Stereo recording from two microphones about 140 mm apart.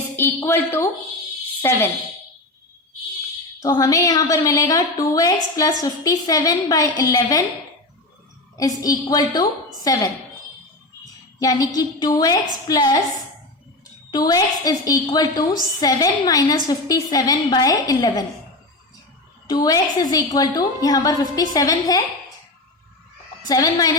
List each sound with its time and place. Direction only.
0.2 s a woman's voice: 20° left (ahead or behind)
3.6 s a woman's voice: 25° left (ahead or behind)
8.5 s a woman's voice: 25° left (ahead or behind)
11.3 s a woman's voice: 25° left (ahead or behind)
14.1 s a woman's voice: 30° left (ahead or behind)
19.5 s a woman's voice: 25° left (ahead or behind)
23.5 s a woman's voice: 25° left (ahead or behind)